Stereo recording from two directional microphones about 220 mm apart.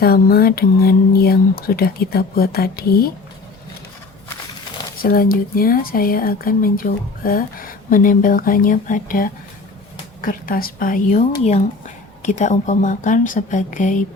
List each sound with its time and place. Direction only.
0.0 s speech: 45° left (ahead or behind)
4.9 s speech: 40° left (ahead or behind)